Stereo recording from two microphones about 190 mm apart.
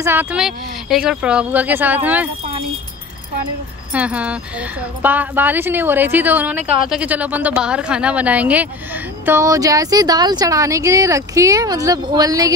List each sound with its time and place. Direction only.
0.0 s speech: 10° right (ahead or behind)
3.9 s speech: 5° right (ahead or behind)